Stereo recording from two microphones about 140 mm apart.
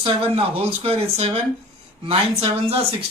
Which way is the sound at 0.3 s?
45° right (ahead or behind).